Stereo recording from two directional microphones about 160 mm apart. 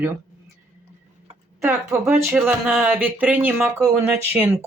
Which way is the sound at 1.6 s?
15° right (ahead or behind).